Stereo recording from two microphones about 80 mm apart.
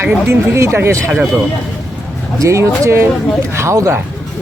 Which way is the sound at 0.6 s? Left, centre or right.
Right.